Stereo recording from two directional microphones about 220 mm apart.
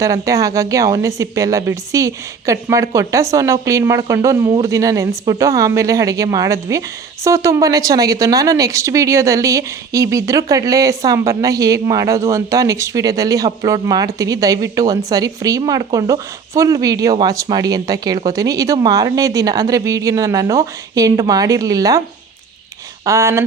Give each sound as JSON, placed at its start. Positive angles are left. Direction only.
{"t": 0.0, "sound": "speech", "side_deg": -15}
{"t": 23.0, "sound": "speech", "side_deg": -15}